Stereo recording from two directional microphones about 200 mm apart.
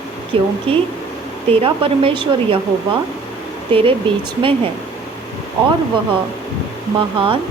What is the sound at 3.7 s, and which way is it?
Speech, 25° right (ahead or behind).